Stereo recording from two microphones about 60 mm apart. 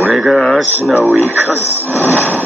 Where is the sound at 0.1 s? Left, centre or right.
Centre.